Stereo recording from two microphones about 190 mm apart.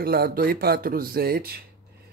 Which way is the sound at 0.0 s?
55° right (ahead or behind).